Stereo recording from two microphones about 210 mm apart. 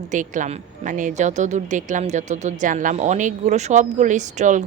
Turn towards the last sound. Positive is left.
turn(degrees=-35)  # may be behind; listen again after turning